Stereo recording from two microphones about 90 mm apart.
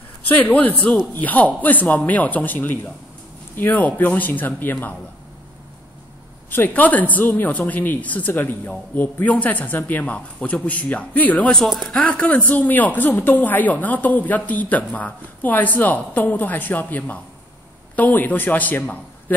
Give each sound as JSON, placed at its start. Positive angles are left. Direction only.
{"t": 0.3, "sound": "speech", "side_deg": 20}
{"t": 6.5, "sound": "speech", "side_deg": 20}